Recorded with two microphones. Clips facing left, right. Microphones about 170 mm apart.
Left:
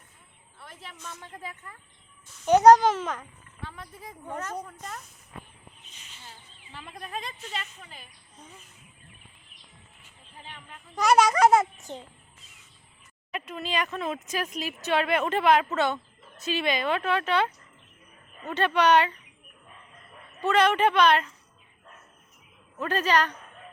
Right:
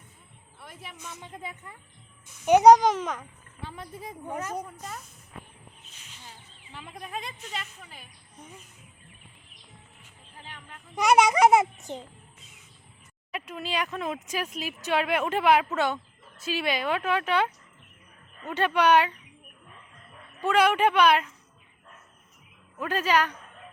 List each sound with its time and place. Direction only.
0.6 s speech: 10° right (ahead or behind)
6.7 s speech: 10° right (ahead or behind)
10.9 s speech: 20° right (ahead or behind)
13.3 s speech: 10° right (ahead or behind)
20.4 s speech: 10° right (ahead or behind)
22.8 s speech: 10° right (ahead or behind)